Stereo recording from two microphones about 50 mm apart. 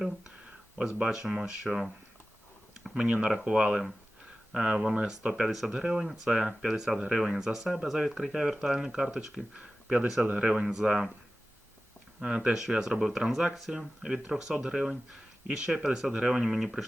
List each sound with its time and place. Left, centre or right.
0.8 s speech: centre
1.6 s speech: centre
2.9 s speech: centre
5.5 s speech: centre
12.2 s speech: centre